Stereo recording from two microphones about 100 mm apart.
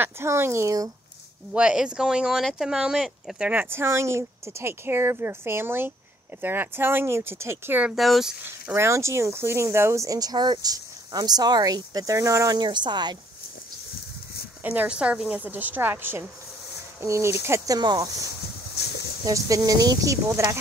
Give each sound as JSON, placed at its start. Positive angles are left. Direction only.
{"t": 0.0, "sound": "a woman's voice", "side_deg": -25}
{"t": 1.5, "sound": "speech", "side_deg": -10}
{"t": 3.7, "sound": "a woman's voice", "side_deg": -25}
{"t": 7.8, "sound": "speech", "side_deg": 0}
{"t": 8.7, "sound": "speech", "side_deg": -30}
{"t": 12.5, "sound": "speech", "side_deg": -50}
{"t": 14.6, "sound": "a woman's voice", "side_deg": -15}
{"t": 17.7, "sound": "speech", "side_deg": -40}
{"t": 19.2, "sound": "speech", "side_deg": -35}